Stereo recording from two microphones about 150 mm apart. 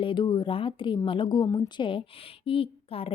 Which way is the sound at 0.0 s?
30° left (ahead or behind).